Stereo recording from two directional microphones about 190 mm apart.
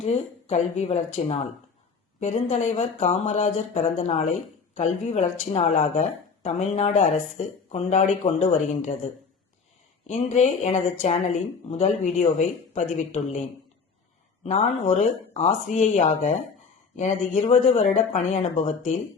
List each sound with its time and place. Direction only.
0.0 s speech: 35° left (ahead or behind)
10.1 s speech: 35° left (ahead or behind)
14.4 s speech: 40° left (ahead or behind)